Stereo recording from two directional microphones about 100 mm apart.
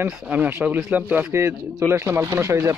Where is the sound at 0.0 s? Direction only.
15° right (ahead or behind).